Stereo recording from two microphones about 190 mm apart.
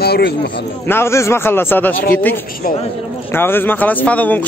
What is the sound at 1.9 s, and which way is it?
Speech, 50° left (ahead or behind).